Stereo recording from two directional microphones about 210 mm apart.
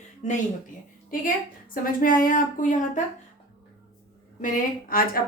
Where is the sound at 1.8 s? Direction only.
40° left (ahead or behind).